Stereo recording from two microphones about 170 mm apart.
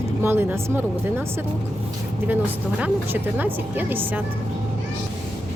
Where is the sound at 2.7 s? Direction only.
10° right (ahead or behind).